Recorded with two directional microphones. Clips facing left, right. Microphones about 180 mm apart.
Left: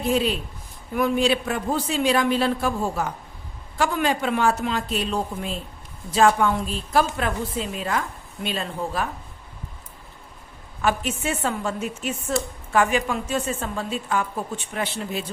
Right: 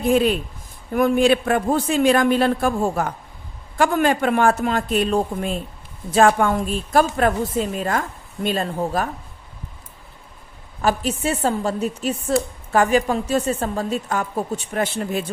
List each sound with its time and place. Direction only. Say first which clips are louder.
0.0 s a woman's voice: right 5 dB; 50° right (ahead or behind)
10.8 s a woman's voice: right 3 dB; 35° right (ahead or behind)